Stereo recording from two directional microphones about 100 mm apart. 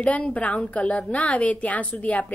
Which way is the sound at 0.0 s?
15° left (ahead or behind).